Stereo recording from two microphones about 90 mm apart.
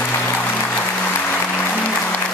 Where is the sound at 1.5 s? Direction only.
15° left (ahead or behind).